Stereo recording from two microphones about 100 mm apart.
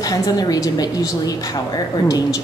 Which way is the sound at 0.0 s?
40° left (ahead or behind).